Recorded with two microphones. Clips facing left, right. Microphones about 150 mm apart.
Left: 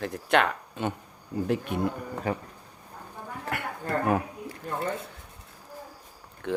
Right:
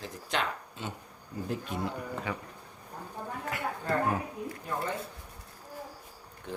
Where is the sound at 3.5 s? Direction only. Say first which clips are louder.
Left 3 dB; 65° left (ahead or behind).